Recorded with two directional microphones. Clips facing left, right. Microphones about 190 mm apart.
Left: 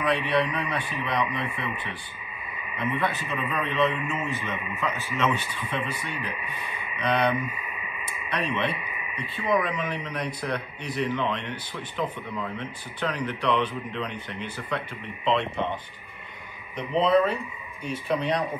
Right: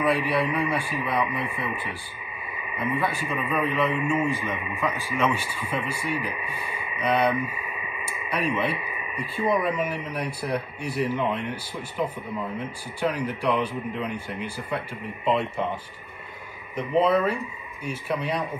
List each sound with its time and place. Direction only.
0.0 s a man's voice: 5° right (ahead or behind)
2.7 s a man's voice: 10° right (ahead or behind)
7.3 s speech: 25° right (ahead or behind)
8.3 s a man's voice: 10° right (ahead or behind)
16.7 s a man's voice: 5° right (ahead or behind)